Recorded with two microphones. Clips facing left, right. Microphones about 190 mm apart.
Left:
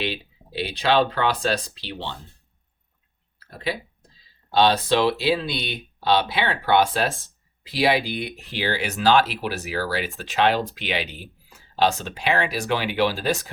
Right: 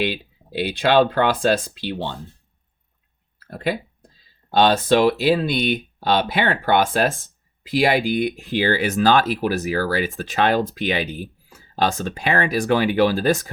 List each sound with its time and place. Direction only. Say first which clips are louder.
0.0 s speech: right 5 dB; 50° right (ahead or behind)
3.4 s speech: right 5 dB; 50° right (ahead or behind)